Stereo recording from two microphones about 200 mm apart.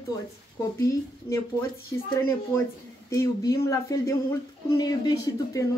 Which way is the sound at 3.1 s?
15° left (ahead or behind).